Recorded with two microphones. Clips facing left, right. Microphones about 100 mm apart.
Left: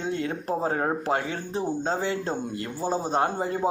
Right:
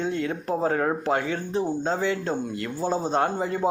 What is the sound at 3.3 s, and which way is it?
Speech, 40° left (ahead or behind).